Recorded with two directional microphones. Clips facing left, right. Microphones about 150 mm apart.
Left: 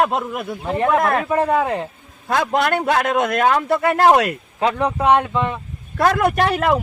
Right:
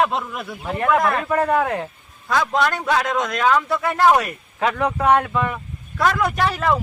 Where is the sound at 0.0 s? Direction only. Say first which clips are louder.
Left 2 dB; 50° left (ahead or behind).